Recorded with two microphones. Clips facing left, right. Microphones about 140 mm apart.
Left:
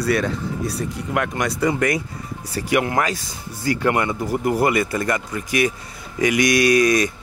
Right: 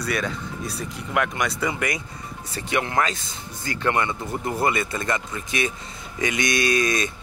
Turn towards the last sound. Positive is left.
turn(degrees=-25)  # may be behind; listen again after turning